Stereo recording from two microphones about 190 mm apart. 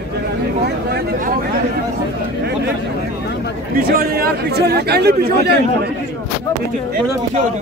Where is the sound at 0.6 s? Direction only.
55° right (ahead or behind).